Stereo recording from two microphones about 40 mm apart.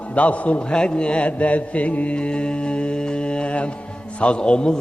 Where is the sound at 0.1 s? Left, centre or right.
Left.